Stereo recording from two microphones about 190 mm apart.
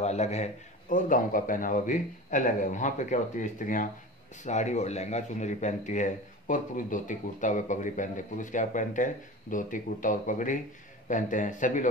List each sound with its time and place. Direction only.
0.0 s a man's voice: 35° left (ahead or behind)